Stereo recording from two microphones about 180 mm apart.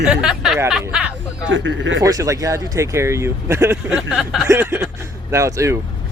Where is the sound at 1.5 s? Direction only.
90° right.